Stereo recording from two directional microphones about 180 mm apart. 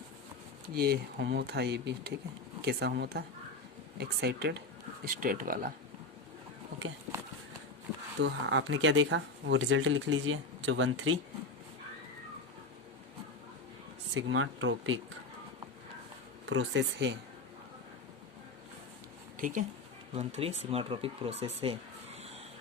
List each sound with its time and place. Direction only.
0.7 s speech: 55° right (ahead or behind)
5.0 s speech: 50° right (ahead or behind)
8.2 s speech: 90° right
14.1 s speech: 90° right
16.5 s speech: 85° right
19.4 s speech: 45° right (ahead or behind)
20.1 s speech: 35° right (ahead or behind)